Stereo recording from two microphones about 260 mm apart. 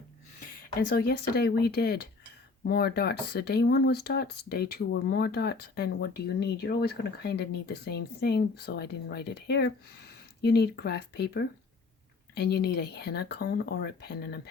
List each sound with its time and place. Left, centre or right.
0.9 s speech: left